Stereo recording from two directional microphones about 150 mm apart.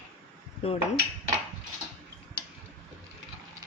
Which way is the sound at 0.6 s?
40° left (ahead or behind).